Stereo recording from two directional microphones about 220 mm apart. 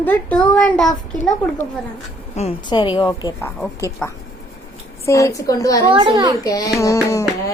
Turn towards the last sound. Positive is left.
turn(degrees=15)  # may be behind; listen again after turning